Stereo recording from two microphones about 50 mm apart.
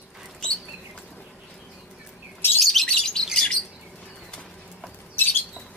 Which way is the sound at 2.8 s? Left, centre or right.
Centre.